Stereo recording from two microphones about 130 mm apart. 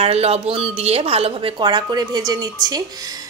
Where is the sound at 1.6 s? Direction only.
30° right (ahead or behind).